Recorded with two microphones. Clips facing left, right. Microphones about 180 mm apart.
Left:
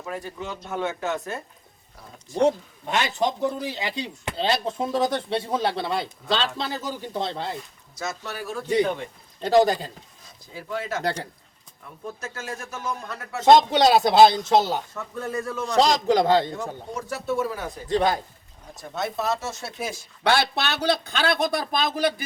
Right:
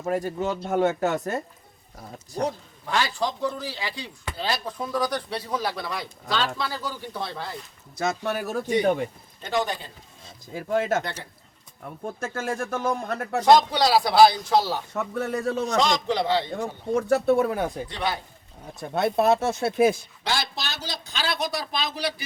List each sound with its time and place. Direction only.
0.0 s speech: 45° right (ahead or behind)
2.4 s speech: 20° left (ahead or behind)
7.9 s speech: 55° right (ahead or behind)
9.4 s a man's voice: 35° left (ahead or behind)
10.5 s speech: 50° right (ahead or behind)
12.2 s speech: 55° right (ahead or behind)
13.4 s speech: 25° left (ahead or behind)
14.9 s speech: 70° right (ahead or behind)
15.7 s a man's voice: 35° left (ahead or behind)
16.6 s speech: 55° right (ahead or behind)
17.8 s a man's voice: 45° left (ahead or behind)
18.8 s speech: 60° right (ahead or behind)
20.2 s speech: 65° left (ahead or behind)